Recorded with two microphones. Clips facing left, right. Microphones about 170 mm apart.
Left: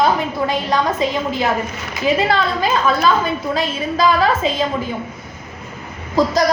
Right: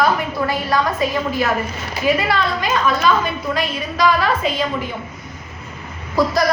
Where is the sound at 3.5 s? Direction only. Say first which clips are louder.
Left 2 dB; 25° left (ahead or behind).